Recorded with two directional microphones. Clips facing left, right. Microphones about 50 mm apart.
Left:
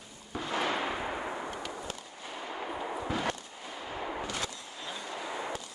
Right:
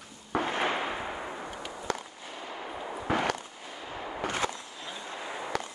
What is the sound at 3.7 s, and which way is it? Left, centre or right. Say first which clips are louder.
Artillery fire: left 2 dB; centre.